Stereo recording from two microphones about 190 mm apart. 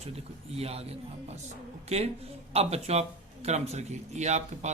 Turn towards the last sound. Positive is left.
turn(degrees=-35)  # may be behind; listen again after turning